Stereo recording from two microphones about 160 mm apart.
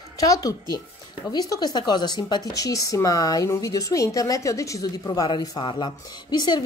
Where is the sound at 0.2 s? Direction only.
20° left (ahead or behind).